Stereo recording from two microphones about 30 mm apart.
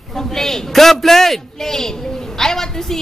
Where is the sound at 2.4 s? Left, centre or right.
Centre.